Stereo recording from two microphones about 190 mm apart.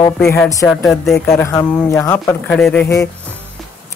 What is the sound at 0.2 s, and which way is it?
Speech, 15° left (ahead or behind).